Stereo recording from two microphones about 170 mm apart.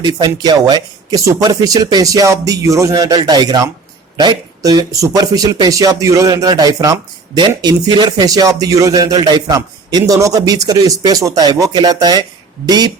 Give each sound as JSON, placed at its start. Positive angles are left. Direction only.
{"t": 0.0, "sound": "speech", "side_deg": -25}